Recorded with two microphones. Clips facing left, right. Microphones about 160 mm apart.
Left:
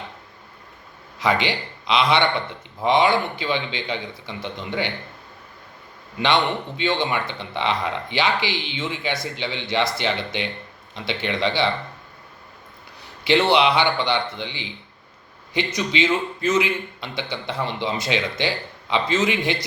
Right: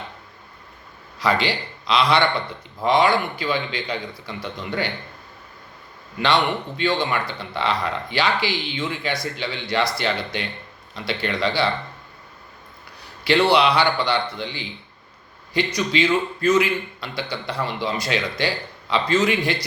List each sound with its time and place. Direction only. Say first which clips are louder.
1.2 s speech: even; 20° left (ahead or behind)
6.2 s speech: even; 20° left (ahead or behind)
13.2 s speech: even; 20° left (ahead or behind)